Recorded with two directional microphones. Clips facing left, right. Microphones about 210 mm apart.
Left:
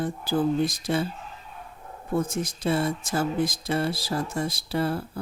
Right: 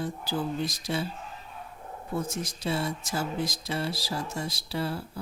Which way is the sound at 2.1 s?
50° left (ahead or behind).